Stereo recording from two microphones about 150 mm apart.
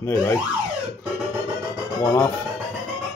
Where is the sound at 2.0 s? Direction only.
20° left (ahead or behind).